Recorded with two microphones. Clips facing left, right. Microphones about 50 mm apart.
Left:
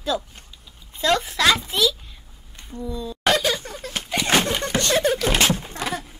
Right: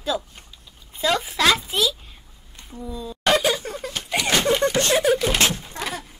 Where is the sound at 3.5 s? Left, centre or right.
Centre.